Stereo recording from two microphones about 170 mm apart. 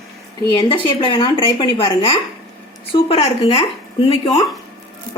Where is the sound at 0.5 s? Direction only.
30° left (ahead or behind).